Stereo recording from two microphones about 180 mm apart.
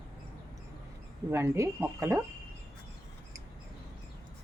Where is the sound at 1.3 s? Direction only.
15° right (ahead or behind).